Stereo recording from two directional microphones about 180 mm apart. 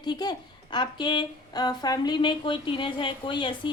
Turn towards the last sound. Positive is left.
turn(degrees=25)  # may be behind; listen again after turning